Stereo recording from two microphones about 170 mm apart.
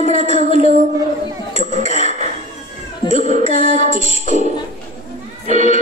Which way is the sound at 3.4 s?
40° left (ahead or behind).